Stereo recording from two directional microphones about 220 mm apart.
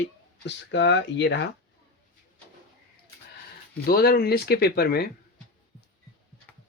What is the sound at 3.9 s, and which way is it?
Speech, 45° left (ahead or behind).